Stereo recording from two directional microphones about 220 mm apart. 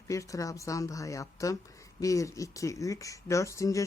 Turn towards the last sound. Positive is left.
turn(degrees=15)  # may be behind; listen again after turning